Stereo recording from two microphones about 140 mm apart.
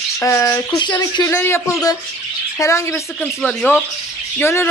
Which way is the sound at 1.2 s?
15° left (ahead or behind).